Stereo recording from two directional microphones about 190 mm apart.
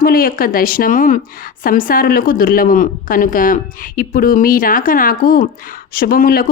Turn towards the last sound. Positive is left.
turn(degrees=50)  # may be behind; listen again after turning